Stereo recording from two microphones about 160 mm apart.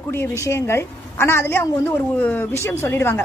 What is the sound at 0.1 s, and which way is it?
A woman's voice, 15° left (ahead or behind).